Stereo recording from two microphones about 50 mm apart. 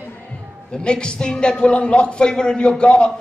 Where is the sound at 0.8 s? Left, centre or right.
Centre.